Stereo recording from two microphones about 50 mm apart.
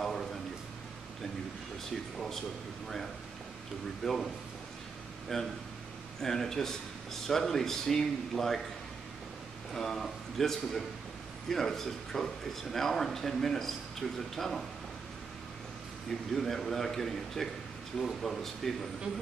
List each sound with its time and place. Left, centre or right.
0.0 s a sound: centre
2.1 s a man's voice: centre
4.0 s speech: centre
5.3 s a man's voice: centre
9.8 s speech: centre
16.1 s speech: centre